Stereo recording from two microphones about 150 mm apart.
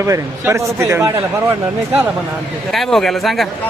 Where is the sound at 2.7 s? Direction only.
Centre (ahead or behind).